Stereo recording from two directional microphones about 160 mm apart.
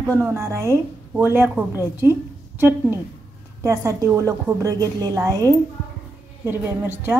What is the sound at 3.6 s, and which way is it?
A woman's voice, 20° right (ahead or behind).